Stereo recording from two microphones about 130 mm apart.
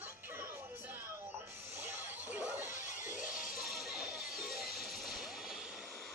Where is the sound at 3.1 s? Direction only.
90° left.